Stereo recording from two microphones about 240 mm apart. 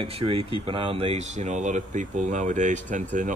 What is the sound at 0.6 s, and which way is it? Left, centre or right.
Speech, right.